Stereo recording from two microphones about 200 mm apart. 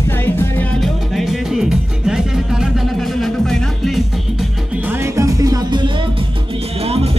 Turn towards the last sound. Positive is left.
turn(degrees=-20)  # may be behind; listen again after turning